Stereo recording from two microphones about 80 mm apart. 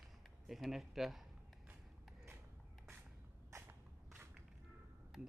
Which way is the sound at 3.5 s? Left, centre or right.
Right.